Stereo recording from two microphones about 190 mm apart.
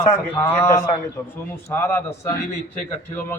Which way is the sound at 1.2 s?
5° left (ahead or behind).